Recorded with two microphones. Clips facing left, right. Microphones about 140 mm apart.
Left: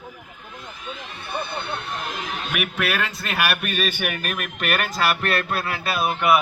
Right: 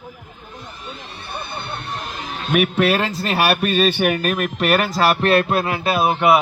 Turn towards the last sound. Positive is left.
turn(degrees=-30)  # may be behind; listen again after turning